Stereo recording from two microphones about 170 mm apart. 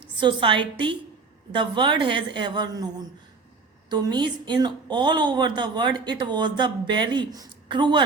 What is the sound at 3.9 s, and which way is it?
A woman's voice, 25° right (ahead or behind).